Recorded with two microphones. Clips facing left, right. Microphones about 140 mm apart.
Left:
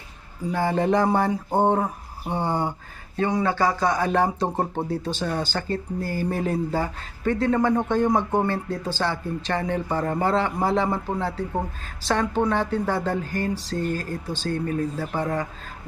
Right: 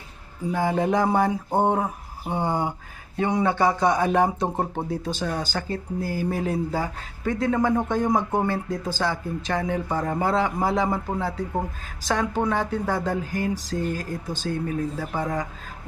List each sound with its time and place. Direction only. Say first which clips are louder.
0.5 s speech: left 1 dB; 10° right (ahead or behind)